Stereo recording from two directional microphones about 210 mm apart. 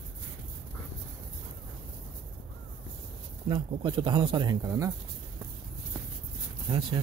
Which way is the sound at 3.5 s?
25° right (ahead or behind).